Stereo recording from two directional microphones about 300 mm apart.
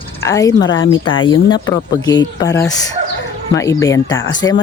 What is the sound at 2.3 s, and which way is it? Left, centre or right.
Speech, centre.